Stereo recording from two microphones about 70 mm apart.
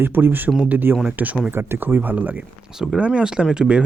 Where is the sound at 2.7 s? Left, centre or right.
Centre.